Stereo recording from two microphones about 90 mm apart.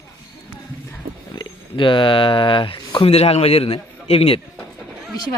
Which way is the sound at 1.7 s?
65° left (ahead or behind).